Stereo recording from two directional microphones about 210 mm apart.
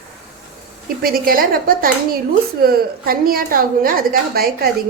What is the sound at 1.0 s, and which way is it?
A woman's voice, 45° right (ahead or behind).